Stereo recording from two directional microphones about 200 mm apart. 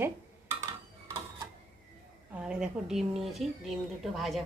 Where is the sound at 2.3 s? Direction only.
5° right (ahead or behind).